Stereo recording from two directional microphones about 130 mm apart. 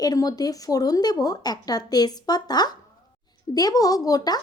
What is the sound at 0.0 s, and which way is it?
Speech, 30° left (ahead or behind).